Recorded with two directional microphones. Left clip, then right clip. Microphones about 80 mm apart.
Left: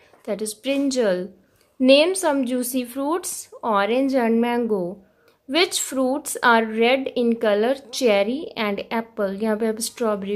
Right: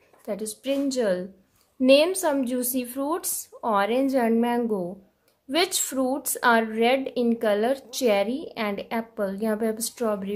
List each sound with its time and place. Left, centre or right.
0.2 s a woman's voice: left
1.8 s a woman's voice: centre